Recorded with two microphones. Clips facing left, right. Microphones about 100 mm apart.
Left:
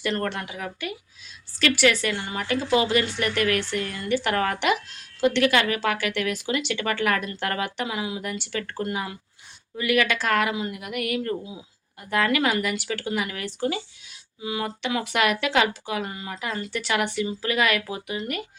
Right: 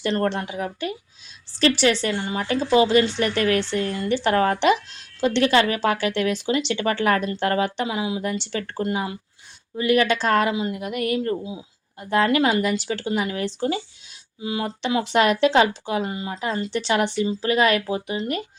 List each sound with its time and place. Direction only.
0.0 s a woman's voice: 30° right (ahead or behind)